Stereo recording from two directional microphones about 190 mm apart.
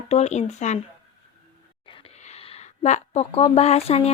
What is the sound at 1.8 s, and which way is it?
Speech, 30° left (ahead or behind).